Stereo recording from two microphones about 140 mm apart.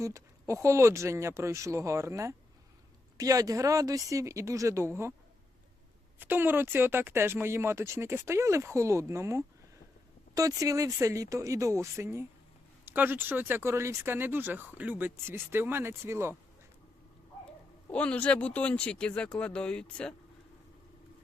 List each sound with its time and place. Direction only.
0.0 s speech: 20° right (ahead or behind)
6.1 s speech: 15° right (ahead or behind)
17.9 s speech: 10° left (ahead or behind)